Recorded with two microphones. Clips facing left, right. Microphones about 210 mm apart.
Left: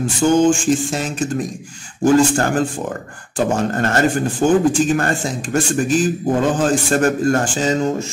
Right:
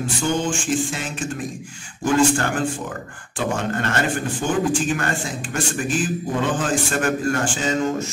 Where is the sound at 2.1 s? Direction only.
40° left (ahead or behind).